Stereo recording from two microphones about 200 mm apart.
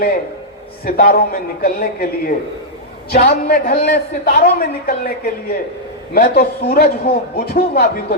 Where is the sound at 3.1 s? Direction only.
45° left (ahead or behind).